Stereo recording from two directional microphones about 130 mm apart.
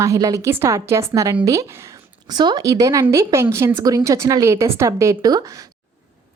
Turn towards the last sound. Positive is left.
turn(degrees=-25)  # may be behind; listen again after turning